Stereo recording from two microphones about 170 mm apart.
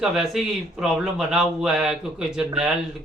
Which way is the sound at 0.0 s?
Centre (ahead or behind).